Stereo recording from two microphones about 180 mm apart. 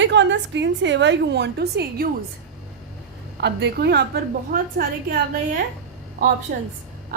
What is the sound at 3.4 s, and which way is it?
A woman's voice, 70° right (ahead or behind).